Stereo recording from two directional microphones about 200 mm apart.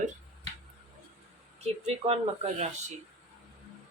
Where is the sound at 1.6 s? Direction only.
30° right (ahead or behind).